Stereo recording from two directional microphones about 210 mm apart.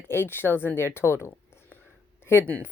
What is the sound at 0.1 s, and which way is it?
A woman's voice, 10° left (ahead or behind).